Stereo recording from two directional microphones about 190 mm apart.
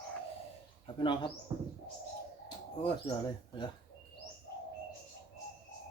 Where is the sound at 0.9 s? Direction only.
25° left (ahead or behind).